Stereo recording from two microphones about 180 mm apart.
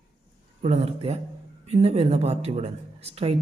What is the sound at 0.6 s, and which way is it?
Speech, 35° right (ahead or behind).